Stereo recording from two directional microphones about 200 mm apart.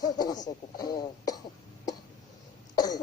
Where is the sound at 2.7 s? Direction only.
20° left (ahead or behind).